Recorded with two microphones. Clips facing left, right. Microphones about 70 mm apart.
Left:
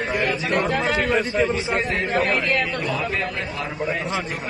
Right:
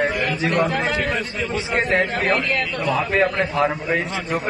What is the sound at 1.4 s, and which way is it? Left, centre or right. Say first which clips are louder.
Speech: left 5 dB; left.